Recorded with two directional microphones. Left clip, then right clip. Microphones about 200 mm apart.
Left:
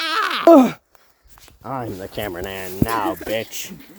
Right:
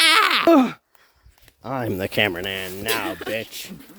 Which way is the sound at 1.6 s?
25° right (ahead or behind).